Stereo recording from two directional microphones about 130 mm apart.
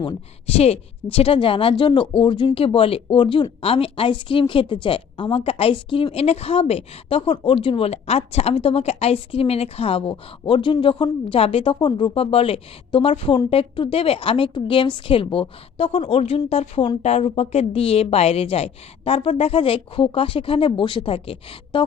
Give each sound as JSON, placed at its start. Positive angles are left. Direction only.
{"t": 0.4, "sound": "speech", "side_deg": 50}